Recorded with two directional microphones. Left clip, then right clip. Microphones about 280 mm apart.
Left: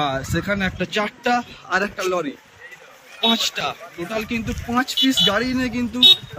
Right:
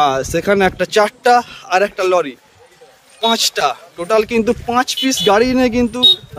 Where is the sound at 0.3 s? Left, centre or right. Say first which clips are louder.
Right 9 dB; centre.